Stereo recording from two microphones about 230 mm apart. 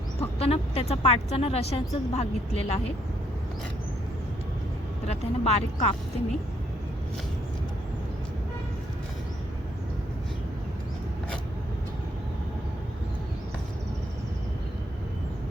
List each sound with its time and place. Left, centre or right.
0.2 s speech: left
5.0 s speech: left